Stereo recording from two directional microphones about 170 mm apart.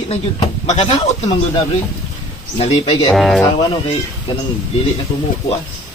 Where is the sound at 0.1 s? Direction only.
40° left (ahead or behind).